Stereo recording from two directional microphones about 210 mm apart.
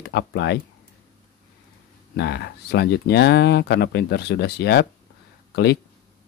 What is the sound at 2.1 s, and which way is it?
Speech, 50° left (ahead or behind).